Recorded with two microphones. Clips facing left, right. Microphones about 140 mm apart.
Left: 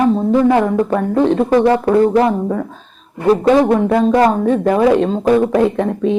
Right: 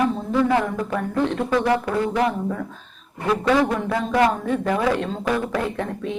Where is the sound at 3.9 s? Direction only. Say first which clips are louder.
Left 6 dB; 40° left (ahead or behind).